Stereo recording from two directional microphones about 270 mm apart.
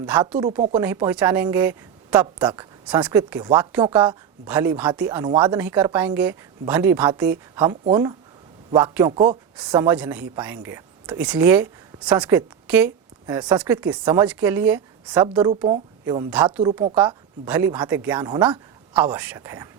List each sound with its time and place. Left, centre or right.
0.1 s a woman's voice: centre
4.4 s a woman's voice: centre
9.7 s a woman's voice: centre
16.3 s a woman's voice: centre